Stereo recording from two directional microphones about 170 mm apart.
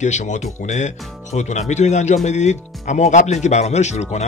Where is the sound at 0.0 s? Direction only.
45° left (ahead or behind).